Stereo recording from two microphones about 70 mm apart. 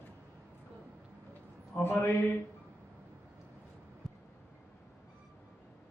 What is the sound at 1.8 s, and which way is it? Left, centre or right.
Speech, left.